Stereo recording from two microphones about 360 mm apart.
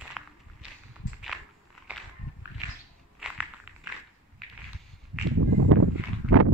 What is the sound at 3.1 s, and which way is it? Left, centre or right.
Walk, centre.